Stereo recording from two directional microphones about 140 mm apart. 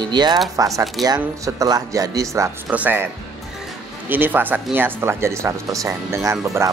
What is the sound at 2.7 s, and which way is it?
Speech, 15° right (ahead or behind).